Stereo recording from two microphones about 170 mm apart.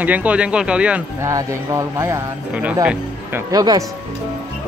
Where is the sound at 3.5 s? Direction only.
20° right (ahead or behind).